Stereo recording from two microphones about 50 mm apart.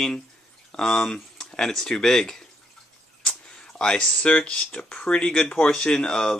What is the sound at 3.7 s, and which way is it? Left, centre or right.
Speech, centre.